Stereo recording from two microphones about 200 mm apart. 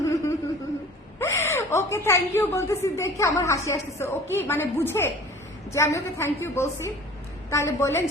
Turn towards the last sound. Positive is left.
turn(degrees=15)  # may be behind; listen again after turning